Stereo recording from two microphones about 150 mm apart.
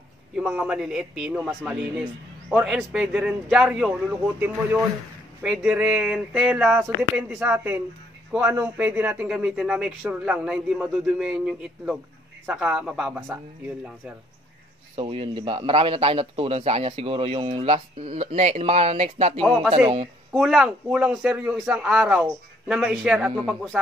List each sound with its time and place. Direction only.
0.4 s speech: 10° right (ahead or behind)
15.0 s a man's voice: 40° right (ahead or behind)
20.3 s speech: 5° right (ahead or behind)